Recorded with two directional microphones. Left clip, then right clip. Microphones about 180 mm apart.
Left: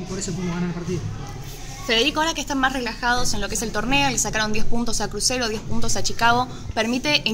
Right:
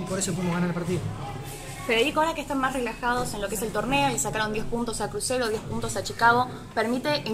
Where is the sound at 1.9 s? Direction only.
40° left (ahead or behind).